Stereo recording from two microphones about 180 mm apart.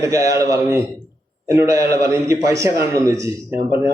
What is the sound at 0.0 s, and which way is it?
A man's voice, 20° right (ahead or behind).